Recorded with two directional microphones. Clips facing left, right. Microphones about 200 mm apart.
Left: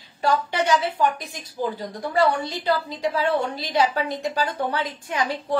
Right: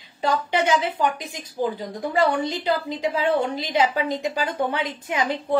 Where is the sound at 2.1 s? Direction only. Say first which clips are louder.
Even; 20° right (ahead or behind).